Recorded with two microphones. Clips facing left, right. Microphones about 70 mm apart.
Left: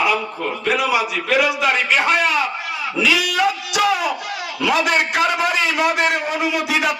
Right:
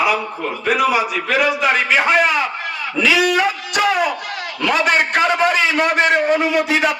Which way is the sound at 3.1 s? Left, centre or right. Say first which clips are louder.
Right 3 dB; right.